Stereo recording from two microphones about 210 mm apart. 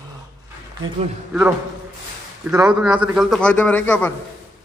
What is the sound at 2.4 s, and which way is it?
A man's voice, 10° right (ahead or behind).